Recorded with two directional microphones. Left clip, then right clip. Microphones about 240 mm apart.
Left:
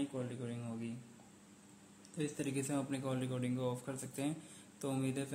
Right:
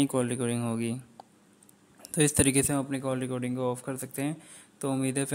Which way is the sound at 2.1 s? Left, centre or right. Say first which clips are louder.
Right 15 dB; right.